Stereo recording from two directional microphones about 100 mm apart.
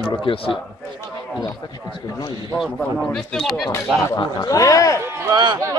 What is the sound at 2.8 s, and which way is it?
Speech, 10° left (ahead or behind).